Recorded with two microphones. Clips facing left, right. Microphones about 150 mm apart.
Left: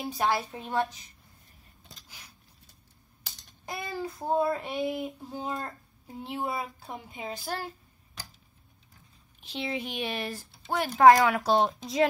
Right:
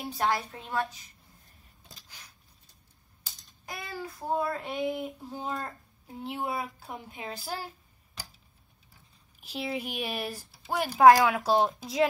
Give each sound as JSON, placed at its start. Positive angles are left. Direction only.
{"t": 0.0, "sound": "speech", "side_deg": 0}
{"t": 0.5, "sound": "a woman's voice", "side_deg": 15}
{"t": 3.6, "sound": "child singing", "side_deg": 25}
{"t": 4.6, "sound": "speech", "side_deg": 5}
{"t": 9.4, "sound": "speech", "side_deg": -5}